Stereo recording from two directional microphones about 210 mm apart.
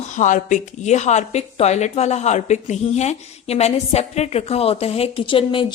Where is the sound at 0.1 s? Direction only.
35° left (ahead or behind).